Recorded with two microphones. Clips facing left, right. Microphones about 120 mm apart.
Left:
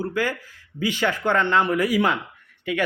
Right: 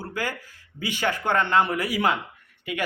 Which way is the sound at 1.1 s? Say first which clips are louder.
Even; 15° right (ahead or behind).